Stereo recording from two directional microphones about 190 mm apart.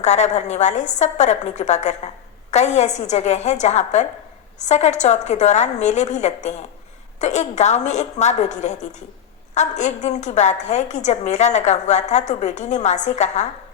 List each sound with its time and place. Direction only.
0.0 s a woman's voice: 35° left (ahead or behind)